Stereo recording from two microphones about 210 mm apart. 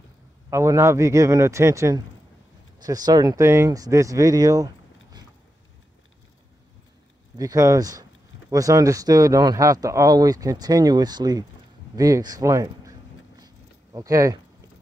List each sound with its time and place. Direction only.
0.5 s speech: 15° right (ahead or behind)
7.3 s speech: 15° right (ahead or behind)
13.9 s speech: 15° right (ahead or behind)